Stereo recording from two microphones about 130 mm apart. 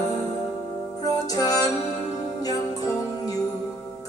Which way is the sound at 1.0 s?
30° left (ahead or behind).